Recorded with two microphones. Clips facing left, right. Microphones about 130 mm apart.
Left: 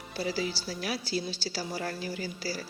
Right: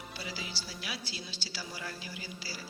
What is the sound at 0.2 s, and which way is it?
A woman's voice, 40° left (ahead or behind).